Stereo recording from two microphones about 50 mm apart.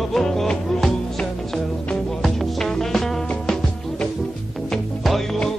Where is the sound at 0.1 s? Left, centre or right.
Centre.